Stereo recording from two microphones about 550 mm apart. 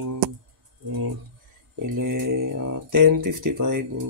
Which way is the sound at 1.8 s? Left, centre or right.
Right.